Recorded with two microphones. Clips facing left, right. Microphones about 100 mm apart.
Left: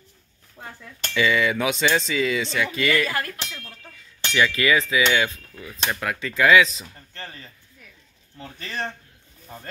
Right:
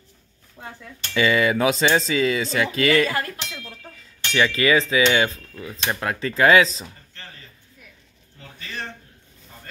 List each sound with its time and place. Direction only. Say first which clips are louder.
0.6 s speech: right 1 dB; 15° left (ahead or behind)
1.1 s speech: right 2 dB; 40° right (ahead or behind)
8.4 s speech: left 3 dB; 35° left (ahead or behind)